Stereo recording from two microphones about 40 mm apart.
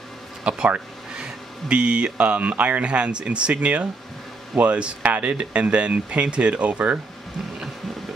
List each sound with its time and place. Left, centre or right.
0.4 s speech: right
5.0 s speech: right
5.3 s speech: right